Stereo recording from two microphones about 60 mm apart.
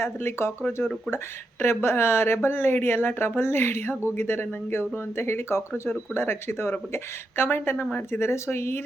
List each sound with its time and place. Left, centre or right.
0.0 s speech: left
8.3 s speech: left